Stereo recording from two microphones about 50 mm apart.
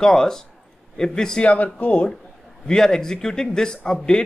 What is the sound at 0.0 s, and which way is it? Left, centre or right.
Speech, centre.